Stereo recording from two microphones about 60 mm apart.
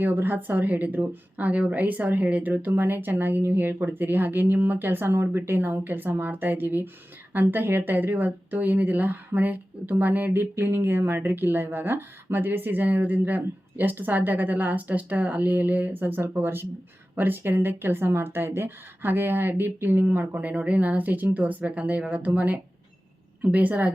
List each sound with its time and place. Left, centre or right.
0.0 s a woman's voice: right
20.1 s speech: right